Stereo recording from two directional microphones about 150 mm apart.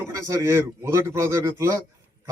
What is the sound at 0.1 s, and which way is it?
Speech, 20° right (ahead or behind).